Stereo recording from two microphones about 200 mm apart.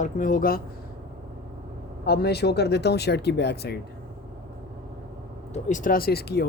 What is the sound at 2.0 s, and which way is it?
Speech, 55° left (ahead or behind).